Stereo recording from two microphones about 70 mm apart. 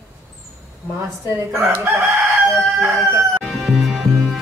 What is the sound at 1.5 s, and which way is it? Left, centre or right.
Chicken, right.